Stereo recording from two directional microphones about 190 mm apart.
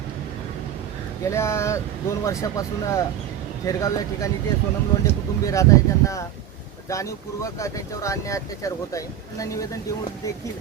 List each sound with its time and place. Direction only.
1.2 s speech: 15° left (ahead or behind)